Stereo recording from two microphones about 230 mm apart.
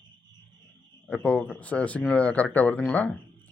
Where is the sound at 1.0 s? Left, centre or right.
Centre.